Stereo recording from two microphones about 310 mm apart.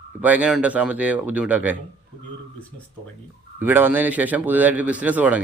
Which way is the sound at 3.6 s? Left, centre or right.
Centre.